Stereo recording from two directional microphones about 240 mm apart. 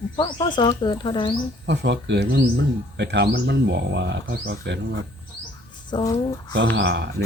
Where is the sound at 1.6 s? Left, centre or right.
Right.